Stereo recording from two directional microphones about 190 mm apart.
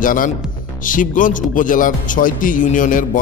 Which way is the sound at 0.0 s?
45° left (ahead or behind).